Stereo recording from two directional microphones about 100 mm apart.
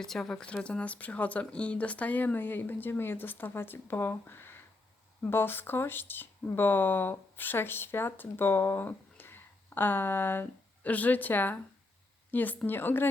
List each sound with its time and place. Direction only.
0.0 s speech: 5° left (ahead or behind); by 13.1 s 20° left (ahead or behind)